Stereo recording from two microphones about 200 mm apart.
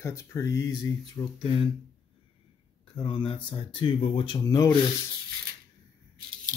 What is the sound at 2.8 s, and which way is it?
Speech, 25° left (ahead or behind).